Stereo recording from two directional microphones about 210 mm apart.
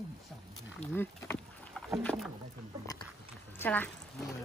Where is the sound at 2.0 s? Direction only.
Centre (ahead or behind).